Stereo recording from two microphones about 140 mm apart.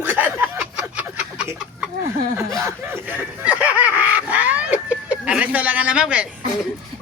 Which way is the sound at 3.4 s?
10° right (ahead or behind).